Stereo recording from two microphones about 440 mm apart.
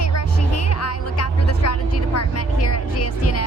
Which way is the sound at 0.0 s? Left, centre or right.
Left.